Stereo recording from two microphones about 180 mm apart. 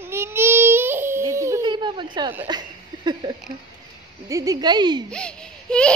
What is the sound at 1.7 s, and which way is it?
Speech, 25° right (ahead or behind).